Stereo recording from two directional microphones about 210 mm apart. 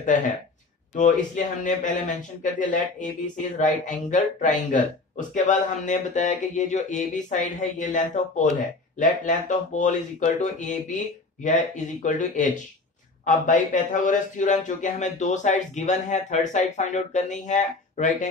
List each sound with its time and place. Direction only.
0.9 s a man's voice: 35° left (ahead or behind)